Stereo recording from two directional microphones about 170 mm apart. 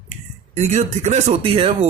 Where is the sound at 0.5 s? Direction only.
45° right (ahead or behind).